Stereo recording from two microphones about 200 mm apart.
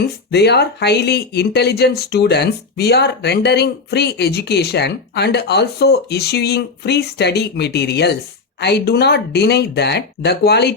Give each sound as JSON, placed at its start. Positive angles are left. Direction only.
{"t": 0.0, "sound": "speech", "side_deg": 55}